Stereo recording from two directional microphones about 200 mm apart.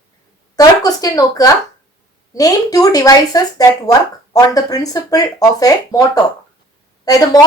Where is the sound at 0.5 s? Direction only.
20° left (ahead or behind).